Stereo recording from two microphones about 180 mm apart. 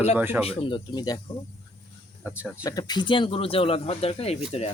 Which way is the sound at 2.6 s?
20° left (ahead or behind).